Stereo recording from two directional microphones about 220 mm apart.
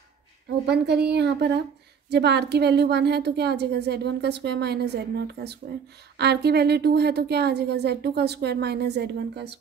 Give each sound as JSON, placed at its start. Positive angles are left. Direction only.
{"t": 0.7, "sound": "a woman's voice", "side_deg": -50}